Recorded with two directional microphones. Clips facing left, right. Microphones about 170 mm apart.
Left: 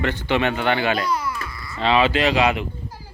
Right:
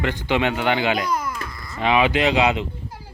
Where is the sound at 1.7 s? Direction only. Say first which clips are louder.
Even; 15° right (ahead or behind).